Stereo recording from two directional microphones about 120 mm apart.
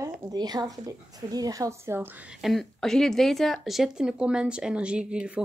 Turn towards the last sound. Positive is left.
turn(degrees=-10)  # may be behind; listen again after turning